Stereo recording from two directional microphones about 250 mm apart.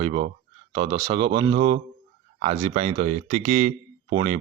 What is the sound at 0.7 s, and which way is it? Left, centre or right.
Speech, centre.